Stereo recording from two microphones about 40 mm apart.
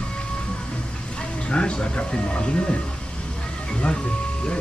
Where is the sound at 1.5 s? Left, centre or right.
Left.